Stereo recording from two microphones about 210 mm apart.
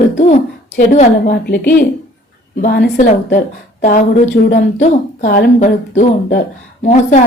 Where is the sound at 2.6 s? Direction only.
40° left (ahead or behind).